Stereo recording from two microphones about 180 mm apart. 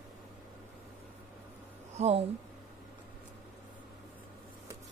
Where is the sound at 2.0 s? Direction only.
40° right (ahead or behind).